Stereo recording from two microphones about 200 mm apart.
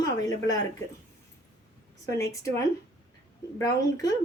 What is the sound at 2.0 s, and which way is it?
A woman's voice, 15° left (ahead or behind).